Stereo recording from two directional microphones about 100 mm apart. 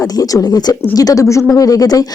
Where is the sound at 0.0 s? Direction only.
35° left (ahead or behind).